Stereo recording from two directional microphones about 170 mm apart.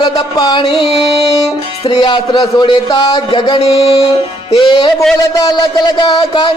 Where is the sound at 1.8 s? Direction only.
30° left (ahead or behind).